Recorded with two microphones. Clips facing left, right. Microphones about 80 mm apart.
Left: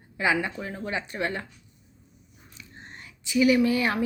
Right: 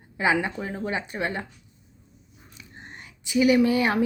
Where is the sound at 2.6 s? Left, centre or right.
Centre.